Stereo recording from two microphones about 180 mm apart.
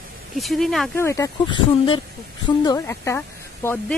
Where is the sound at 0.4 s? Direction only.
Centre (ahead or behind).